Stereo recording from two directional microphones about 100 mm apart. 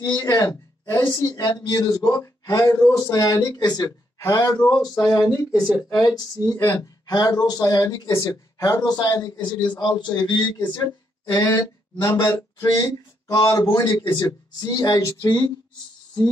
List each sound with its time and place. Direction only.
0.1 s speech: 40° left (ahead or behind)
4.2 s speech: 30° left (ahead or behind)
6.6 s speech: 30° left (ahead or behind)
7.1 s a man's voice: 40° left (ahead or behind)
11.3 s speech: 40° left (ahead or behind)
15.2 s a man's voice: 45° left (ahead or behind)